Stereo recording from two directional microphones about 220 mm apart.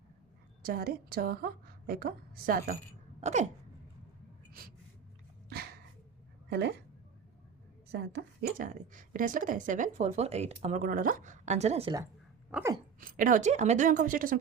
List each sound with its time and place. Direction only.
0.6 s a woman's voice: 40° right (ahead or behind)
3.2 s hiccup: 30° right (ahead or behind)
6.5 s speech: 50° right (ahead or behind)
7.9 s a woman's voice: 45° right (ahead or behind); by 11.9 s 30° right (ahead or behind)
12.5 s a sound: 5° right (ahead or behind)
13.0 s a woman's voice: 40° right (ahead or behind)